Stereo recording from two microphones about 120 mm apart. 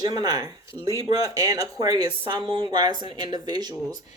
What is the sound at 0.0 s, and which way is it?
Speech, 35° right (ahead or behind).